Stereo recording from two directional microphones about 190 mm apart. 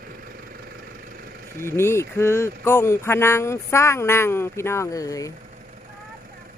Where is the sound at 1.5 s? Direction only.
15° left (ahead or behind).